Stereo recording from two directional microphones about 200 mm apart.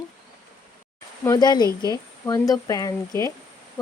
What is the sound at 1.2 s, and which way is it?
Speech, 20° left (ahead or behind).